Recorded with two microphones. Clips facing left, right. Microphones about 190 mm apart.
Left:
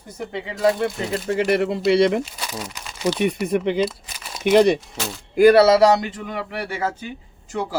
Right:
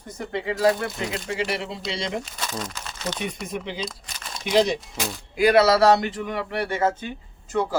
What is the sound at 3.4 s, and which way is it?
Speech, 60° left (ahead or behind).